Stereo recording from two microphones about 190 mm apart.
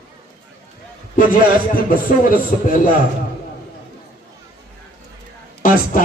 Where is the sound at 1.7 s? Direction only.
50° left (ahead or behind).